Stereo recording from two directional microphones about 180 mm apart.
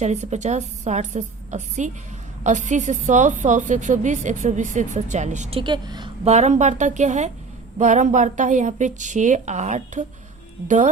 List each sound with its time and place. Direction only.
0.0 s a woman's voice: 40° right (ahead or behind); by 6.1 s 25° right (ahead or behind)
6.2 s a woman's voice: 40° right (ahead or behind)